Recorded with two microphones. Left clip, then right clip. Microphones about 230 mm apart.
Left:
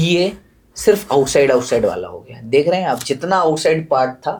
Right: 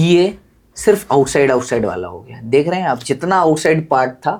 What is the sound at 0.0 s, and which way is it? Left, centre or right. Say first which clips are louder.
Speech: right 3 dB; right.